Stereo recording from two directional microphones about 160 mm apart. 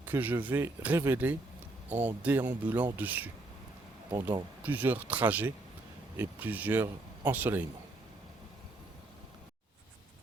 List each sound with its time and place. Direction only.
0.0 s speech: 10° right (ahead or behind)
4.1 s speech: 25° right (ahead or behind)
4.6 s speech: 10° right (ahead or behind)